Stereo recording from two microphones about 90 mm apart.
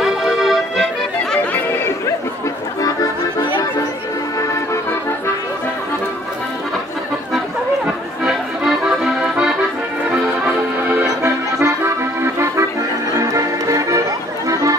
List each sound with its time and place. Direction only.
0.0 s accordion: 5° right (ahead or behind)
7.8 s accordion: 5° right (ahead or behind)
10.4 s music: 20° right (ahead or behind)
11.2 s accordion: 30° right (ahead or behind)
13.2 s music: 40° right (ahead or behind)